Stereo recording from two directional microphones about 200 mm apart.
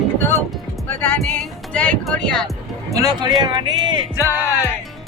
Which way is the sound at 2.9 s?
20° right (ahead or behind).